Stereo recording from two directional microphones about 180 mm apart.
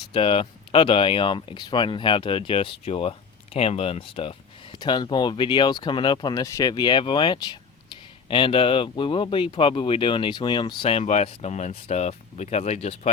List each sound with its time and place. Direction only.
0.1 s speech: 30° left (ahead or behind)